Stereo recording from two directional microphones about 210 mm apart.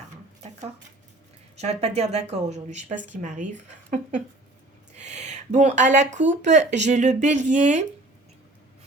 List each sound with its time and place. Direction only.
1.5 s speech: 30° right (ahead or behind)
4.9 s a sound: 35° right (ahead or behind)
6.4 s speech: 35° right (ahead or behind)